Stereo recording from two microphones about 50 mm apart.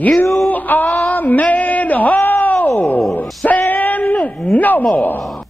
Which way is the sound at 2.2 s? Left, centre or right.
Left.